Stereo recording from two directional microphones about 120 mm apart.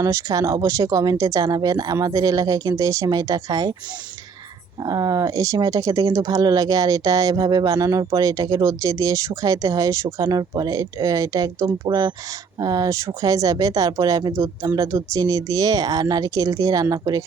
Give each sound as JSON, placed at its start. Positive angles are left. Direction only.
{"t": 0.0, "sound": "speech", "side_deg": -30}
{"t": 4.8, "sound": "speech", "side_deg": -30}